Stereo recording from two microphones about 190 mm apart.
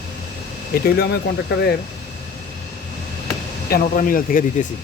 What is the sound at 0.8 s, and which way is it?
Speech, 55° left (ahead or behind).